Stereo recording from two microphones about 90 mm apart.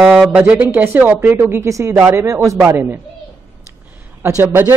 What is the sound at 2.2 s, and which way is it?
Speech, 35° right (ahead or behind).